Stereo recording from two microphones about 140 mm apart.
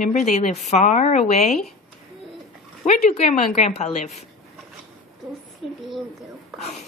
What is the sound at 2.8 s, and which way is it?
A woman's voice, 60° left (ahead or behind).